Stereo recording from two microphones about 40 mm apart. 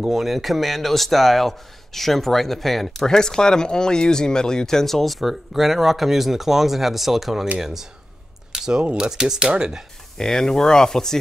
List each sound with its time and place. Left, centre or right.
0.0 s speech: centre
8.5 s a sound: centre
8.9 s speech: centre
10.1 s speech: centre